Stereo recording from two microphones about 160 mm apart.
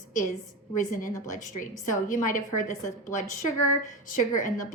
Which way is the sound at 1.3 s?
50° left (ahead or behind).